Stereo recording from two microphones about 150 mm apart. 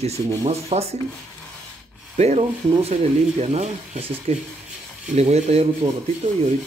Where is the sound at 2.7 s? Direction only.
45° right (ahead or behind).